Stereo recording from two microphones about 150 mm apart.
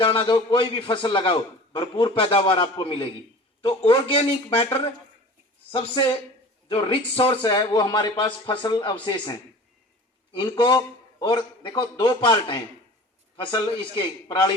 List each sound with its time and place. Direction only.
0.0 s a man's voice: 35° left (ahead or behind)